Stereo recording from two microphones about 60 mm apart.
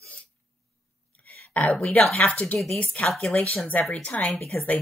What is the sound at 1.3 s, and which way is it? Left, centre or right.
A woman's voice, left.